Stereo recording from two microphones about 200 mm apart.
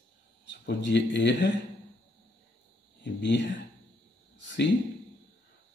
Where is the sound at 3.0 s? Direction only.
60° left (ahead or behind).